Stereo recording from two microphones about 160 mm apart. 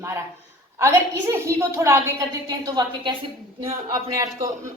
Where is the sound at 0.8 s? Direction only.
15° right (ahead or behind).